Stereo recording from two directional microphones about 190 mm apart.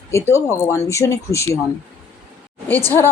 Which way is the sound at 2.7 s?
10° left (ahead or behind).